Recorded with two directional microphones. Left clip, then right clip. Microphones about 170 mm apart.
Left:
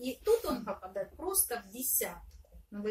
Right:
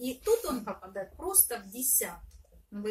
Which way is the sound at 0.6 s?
20° right (ahead or behind).